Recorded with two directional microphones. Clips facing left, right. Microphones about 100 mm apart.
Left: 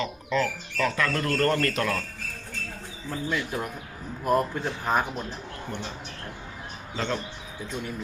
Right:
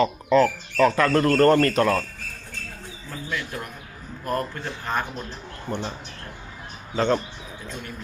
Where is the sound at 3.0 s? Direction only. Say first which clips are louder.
Left 2 dB; 10° left (ahead or behind).